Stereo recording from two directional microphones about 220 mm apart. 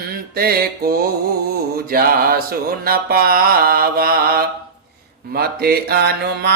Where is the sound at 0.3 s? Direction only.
45° right (ahead or behind).